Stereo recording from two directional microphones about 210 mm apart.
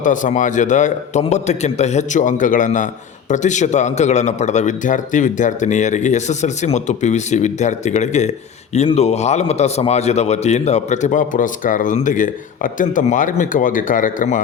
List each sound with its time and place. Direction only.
0.0 s a man's voice: 40° left (ahead or behind)